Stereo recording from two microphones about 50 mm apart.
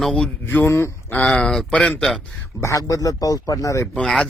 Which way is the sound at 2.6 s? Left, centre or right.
Right.